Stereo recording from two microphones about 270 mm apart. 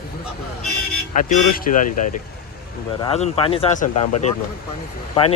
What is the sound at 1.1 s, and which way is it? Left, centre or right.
Speech, left.